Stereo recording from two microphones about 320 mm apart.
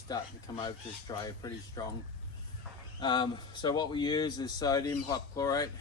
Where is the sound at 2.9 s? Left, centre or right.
Centre.